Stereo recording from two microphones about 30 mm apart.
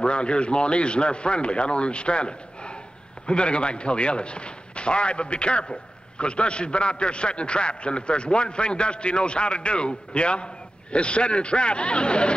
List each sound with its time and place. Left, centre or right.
0.0 s a man's voice: left